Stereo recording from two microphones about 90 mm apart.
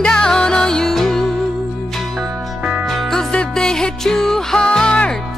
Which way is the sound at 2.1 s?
10° right (ahead or behind).